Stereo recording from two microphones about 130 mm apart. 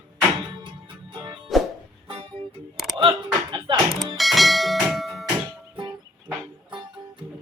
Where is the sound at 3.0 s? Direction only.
40° right (ahead or behind).